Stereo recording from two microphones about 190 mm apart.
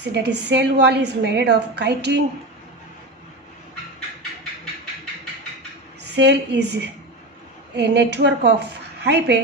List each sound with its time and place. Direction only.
0.1 s a woman's voice: 65° right (ahead or behind)
6.0 s a woman's voice: 65° right (ahead or behind)